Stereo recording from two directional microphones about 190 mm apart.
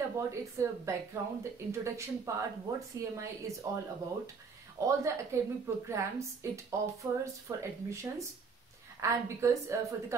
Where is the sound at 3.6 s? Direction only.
15° right (ahead or behind).